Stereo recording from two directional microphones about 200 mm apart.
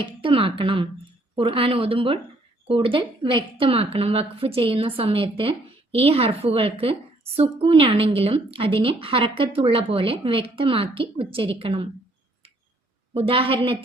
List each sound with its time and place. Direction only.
0.0 s a woman's voice: 25° right (ahead or behind)
13.1 s a woman's voice: 30° right (ahead or behind)